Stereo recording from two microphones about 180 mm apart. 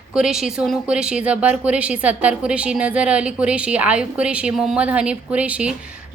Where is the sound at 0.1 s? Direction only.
5° right (ahead or behind).